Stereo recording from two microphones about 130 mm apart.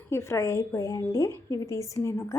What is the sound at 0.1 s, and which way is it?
A woman's voice, 20° left (ahead or behind).